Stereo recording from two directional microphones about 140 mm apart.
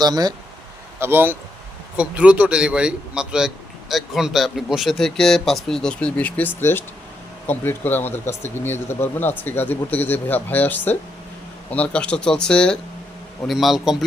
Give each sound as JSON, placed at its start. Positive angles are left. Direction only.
{"t": 0.0, "sound": "speech", "side_deg": -30}
{"t": 0.9, "sound": "a man's voice", "side_deg": -15}